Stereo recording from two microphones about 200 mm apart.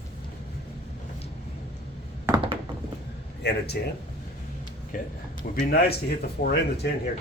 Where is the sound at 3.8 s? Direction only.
55° left (ahead or behind).